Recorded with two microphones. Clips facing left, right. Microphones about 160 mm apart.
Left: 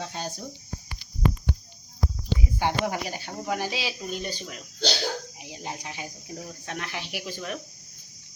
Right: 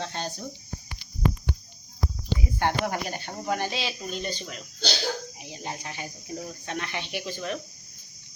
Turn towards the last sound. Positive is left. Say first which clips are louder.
# right 2 dB
turn(degrees=5)  # may be behind; listen again after turning